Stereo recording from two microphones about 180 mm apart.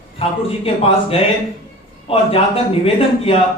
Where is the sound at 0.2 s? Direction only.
30° left (ahead or behind).